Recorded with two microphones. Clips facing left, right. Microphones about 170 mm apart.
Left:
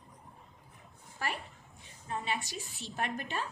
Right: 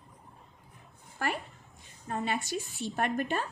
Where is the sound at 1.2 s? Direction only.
55° right (ahead or behind).